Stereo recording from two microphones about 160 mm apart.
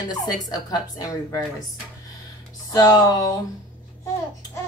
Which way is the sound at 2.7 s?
25° left (ahead or behind).